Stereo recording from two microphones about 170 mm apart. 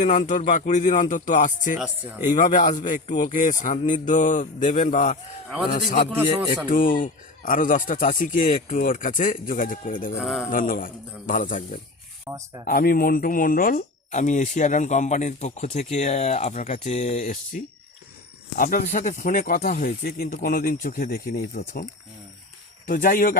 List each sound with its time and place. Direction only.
0.0 s speech: 50° left (ahead or behind)
1.8 s speech: 10° right (ahead or behind)
2.3 s speech: 45° left (ahead or behind)
10.2 s speech: 5° right (ahead or behind)
10.5 s speech: 55° left (ahead or behind)
12.3 s speech: 20° right (ahead or behind)
12.6 s speech: 60° left (ahead or behind)
22.9 s speech: 55° left (ahead or behind)